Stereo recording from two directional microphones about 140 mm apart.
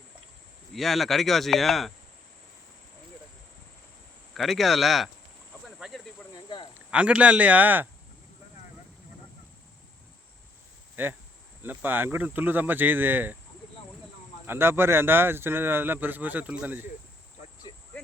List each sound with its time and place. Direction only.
0.7 s speech: centre (ahead or behind)
4.4 s speech: centre (ahead or behind)
5.6 s cricket: centre (ahead or behind)
6.3 s a sound: 35° left (ahead or behind)
6.9 s speech: 10° right (ahead or behind)
11.0 s speech: 15° right (ahead or behind)
14.4 s speech: 15° right (ahead or behind)
17.7 s a sound: 35° left (ahead or behind)